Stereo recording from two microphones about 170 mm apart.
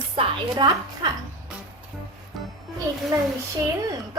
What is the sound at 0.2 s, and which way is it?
Speech, 25° right (ahead or behind).